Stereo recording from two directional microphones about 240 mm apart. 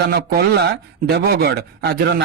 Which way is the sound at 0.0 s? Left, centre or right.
Right.